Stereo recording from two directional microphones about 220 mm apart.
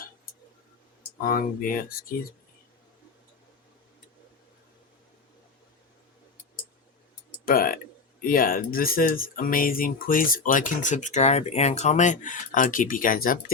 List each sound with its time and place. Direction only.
1.2 s speech: 40° left (ahead or behind)
7.4 s speech: 40° left (ahead or behind)